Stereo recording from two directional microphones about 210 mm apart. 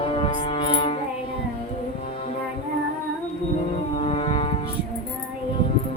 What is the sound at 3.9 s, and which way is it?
Music, 25° left (ahead or behind).